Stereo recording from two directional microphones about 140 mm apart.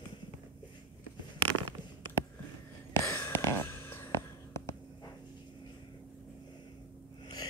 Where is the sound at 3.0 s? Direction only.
20° left (ahead or behind).